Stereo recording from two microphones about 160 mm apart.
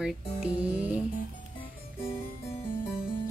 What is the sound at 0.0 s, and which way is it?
Music, 5° right (ahead or behind).